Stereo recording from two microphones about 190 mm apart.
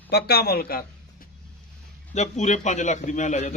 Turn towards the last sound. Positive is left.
turn(degrees=40)  # may be behind; listen again after turning